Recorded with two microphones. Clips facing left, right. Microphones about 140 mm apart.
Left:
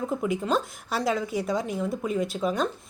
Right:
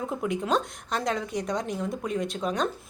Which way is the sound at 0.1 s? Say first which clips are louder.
Even; centre (ahead or behind).